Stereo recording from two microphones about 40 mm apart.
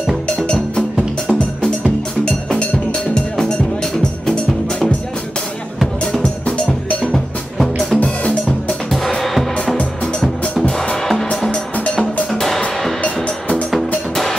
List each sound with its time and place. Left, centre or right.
0.5 s music: left
2.2 s cowbell: left
6.4 s percussion: left
7.5 s music: centre
12.3 s music: centre
13.0 s music: left
13.7 s music: centre